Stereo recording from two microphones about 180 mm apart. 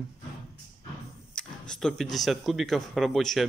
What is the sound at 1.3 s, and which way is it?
Speech, 5° left (ahead or behind).